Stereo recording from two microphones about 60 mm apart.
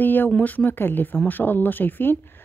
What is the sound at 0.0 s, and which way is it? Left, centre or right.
A woman's voice, left.